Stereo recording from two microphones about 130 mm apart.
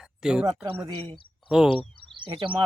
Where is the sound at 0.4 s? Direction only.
30° right (ahead or behind).